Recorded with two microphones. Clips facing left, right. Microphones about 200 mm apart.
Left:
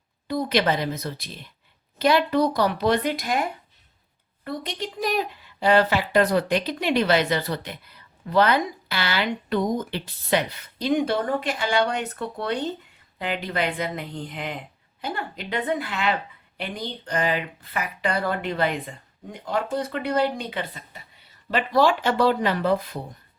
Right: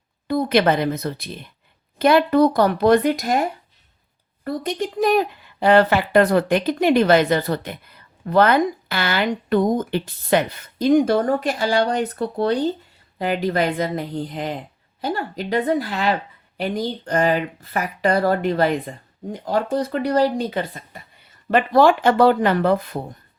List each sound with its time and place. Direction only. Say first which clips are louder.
0.3 s speech: right 5 dB; 55° right (ahead or behind)